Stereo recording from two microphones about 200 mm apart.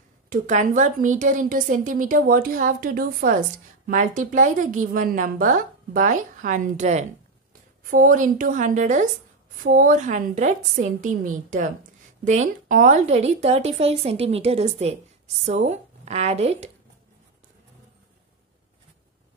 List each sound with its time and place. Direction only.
0.3 s a woman's voice: 40° right (ahead or behind)
12.3 s a woman's voice: 35° right (ahead or behind)